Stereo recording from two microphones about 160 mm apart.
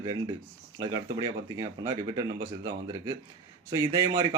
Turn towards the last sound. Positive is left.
turn(degrees=-25)  # may be behind; listen again after turning